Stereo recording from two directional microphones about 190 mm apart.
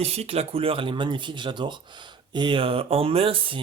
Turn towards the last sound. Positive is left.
turn(degrees=-25)  # may be behind; listen again after turning